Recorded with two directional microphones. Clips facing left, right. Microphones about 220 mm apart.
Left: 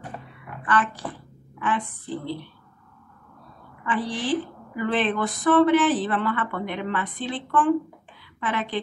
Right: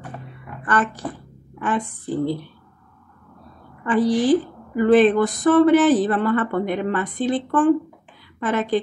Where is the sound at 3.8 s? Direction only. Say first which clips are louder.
Right 9 dB; 45° right (ahead or behind).